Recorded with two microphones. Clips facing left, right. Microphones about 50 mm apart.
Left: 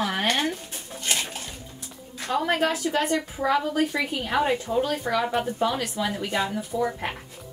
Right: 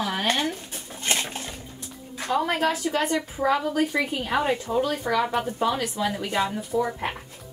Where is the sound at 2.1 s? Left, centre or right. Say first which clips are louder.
Right 2 dB; centre.